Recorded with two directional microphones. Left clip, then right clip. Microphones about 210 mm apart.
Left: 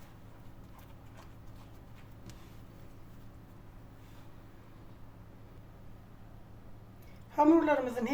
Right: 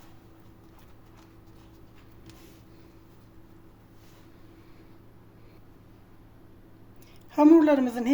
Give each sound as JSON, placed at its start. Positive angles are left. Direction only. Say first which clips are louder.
{"t": 7.3, "sound": "a woman's voice", "louder": "right 7 dB", "side_deg": -50}